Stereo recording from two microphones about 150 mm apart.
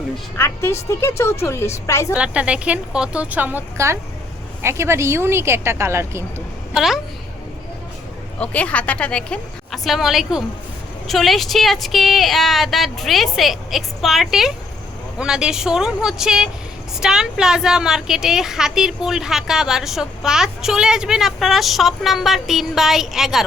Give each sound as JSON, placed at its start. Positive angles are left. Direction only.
{"t": 0.3, "sound": "a woman's voice", "side_deg": 15}
{"t": 2.1, "sound": "a woman's voice", "side_deg": -10}
{"t": 6.7, "sound": "a woman's voice", "side_deg": 0}
{"t": 8.4, "sound": "a woman's voice", "side_deg": 10}